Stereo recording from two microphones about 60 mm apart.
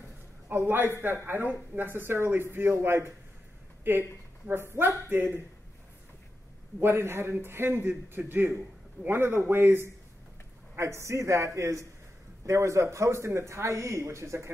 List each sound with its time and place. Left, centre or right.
0.5 s speech: right
6.8 s speech: right
10.8 s a man's voice: right